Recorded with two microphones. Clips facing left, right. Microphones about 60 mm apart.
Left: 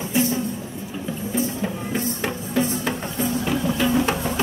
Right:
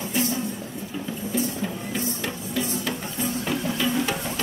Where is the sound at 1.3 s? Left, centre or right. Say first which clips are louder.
Left 2 dB; left.